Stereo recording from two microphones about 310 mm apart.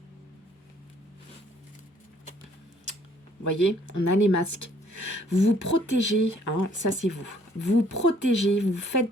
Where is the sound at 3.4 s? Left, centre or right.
Left.